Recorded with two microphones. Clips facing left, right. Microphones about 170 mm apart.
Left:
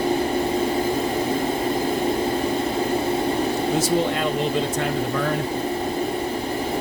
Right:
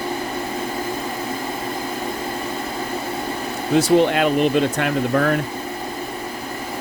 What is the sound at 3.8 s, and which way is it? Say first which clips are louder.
Speech: right 10 dB; 70° right (ahead or behind).